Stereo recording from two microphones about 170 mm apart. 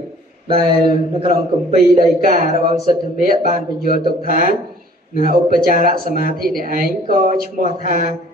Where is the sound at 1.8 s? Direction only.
55° right (ahead or behind).